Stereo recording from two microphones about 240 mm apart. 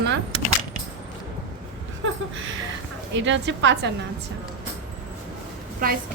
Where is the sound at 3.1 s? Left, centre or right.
Right.